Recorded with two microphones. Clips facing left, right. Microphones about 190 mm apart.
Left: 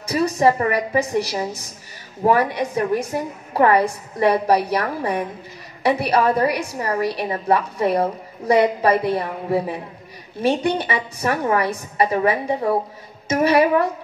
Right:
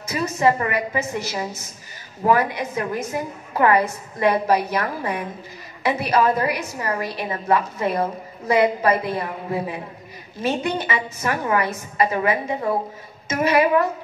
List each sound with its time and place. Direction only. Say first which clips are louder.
0.0 s a woman's voice: left 3 dB; 35° left (ahead or behind)